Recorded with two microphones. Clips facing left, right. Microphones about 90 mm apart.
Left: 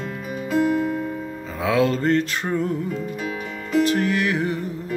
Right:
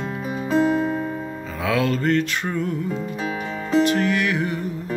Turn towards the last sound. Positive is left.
turn(degrees=30)  # may be behind; listen again after turning